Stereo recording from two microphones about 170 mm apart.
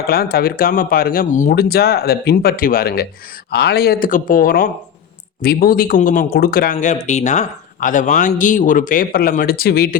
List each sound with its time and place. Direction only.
0.1 s speech: 65° left (ahead or behind)